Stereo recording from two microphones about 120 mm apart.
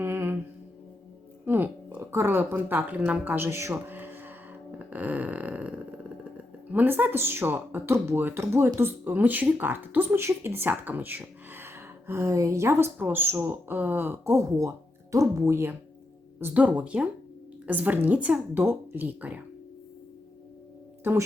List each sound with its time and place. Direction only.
0.0 s mantra: 20° right (ahead or behind)
1.5 s speech: 15° right (ahead or behind)
16.4 s a woman's voice: 10° right (ahead or behind)
21.0 s speech: 20° right (ahead or behind)